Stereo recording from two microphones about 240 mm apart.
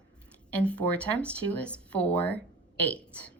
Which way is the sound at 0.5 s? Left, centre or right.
Centre.